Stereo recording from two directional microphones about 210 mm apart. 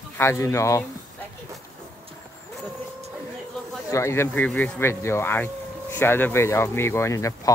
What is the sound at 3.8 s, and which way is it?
Speech, 15° left (ahead or behind).